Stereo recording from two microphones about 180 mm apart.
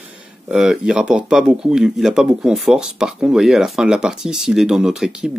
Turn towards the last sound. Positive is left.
turn(degrees=-5)  # may be behind; listen again after turning